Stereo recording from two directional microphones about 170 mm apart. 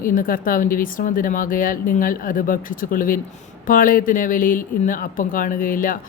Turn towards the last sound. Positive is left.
turn(degrees=55)  # may be behind; listen again after turning